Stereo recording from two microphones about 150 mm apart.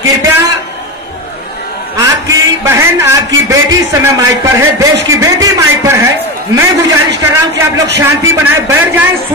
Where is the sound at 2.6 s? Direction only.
20° right (ahead or behind).